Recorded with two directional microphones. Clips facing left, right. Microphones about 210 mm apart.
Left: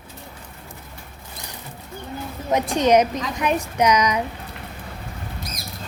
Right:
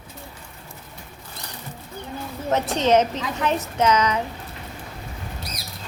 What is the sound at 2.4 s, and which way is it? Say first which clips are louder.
A woman's voice: left 2 dB; 15° left (ahead or behind).